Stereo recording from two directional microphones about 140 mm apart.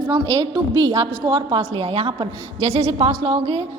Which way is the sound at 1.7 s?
45° right (ahead or behind).